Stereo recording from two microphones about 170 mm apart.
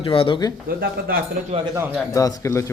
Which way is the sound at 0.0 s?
30° left (ahead or behind).